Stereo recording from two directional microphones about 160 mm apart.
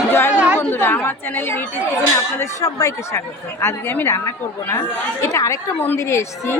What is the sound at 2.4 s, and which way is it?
Speech, 20° left (ahead or behind).